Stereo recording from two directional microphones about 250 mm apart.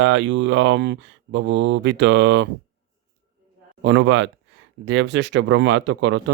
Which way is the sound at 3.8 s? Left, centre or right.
Right.